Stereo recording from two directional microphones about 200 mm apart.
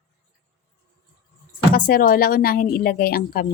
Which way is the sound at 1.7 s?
45° left (ahead or behind).